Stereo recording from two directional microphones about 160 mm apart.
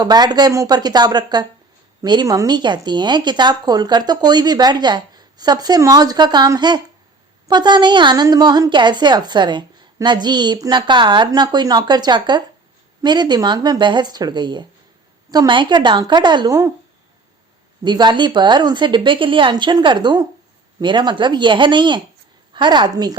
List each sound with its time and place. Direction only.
0.0 s a woman's voice: 25° right (ahead or behind)
17.8 s a woman's voice: 30° right (ahead or behind)